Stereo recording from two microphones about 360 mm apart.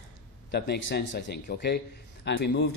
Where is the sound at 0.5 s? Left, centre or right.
Left.